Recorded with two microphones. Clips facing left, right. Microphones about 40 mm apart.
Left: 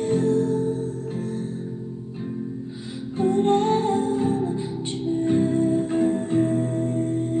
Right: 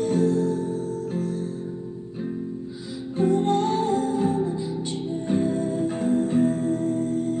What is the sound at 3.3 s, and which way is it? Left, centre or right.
Music, left.